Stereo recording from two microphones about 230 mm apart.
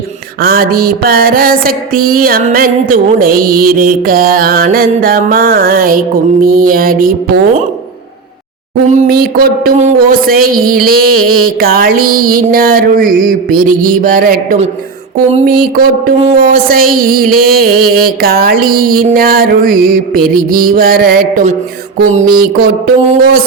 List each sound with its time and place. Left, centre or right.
0.4 s music: right
8.9 s music: right
15.7 s music: right